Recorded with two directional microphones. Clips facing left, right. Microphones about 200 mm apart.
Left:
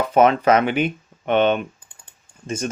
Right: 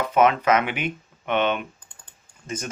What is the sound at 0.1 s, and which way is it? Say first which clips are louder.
Speech: left 4 dB; 35° left (ahead or behind).